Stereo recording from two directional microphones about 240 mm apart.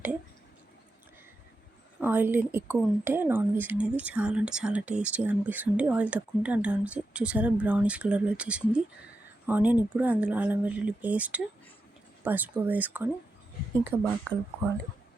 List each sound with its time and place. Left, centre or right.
2.0 s speech: centre